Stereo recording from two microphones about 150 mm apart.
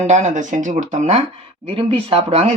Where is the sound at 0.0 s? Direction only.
50° right (ahead or behind).